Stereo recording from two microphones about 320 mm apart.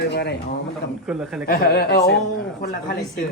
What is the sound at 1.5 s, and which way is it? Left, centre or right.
Speech, left.